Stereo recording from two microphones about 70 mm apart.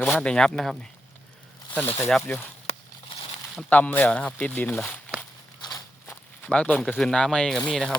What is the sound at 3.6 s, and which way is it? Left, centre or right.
Speech, left.